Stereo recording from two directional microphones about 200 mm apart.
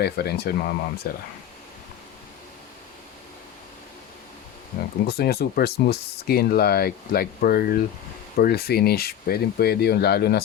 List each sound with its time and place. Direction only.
0.0 s speech: 55° left (ahead or behind)
5.0 s speech: 50° left (ahead or behind)